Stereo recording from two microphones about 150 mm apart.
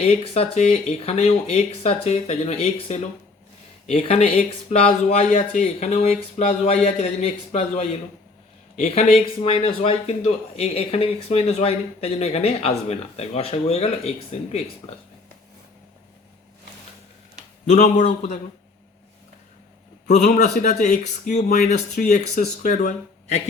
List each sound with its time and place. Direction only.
0.0 s a man's voice: 40° left (ahead or behind)
17.7 s a man's voice: 50° left (ahead or behind)
20.1 s a man's voice: 50° left (ahead or behind)